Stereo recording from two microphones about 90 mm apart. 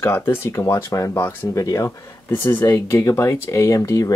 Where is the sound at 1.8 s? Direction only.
25° left (ahead or behind).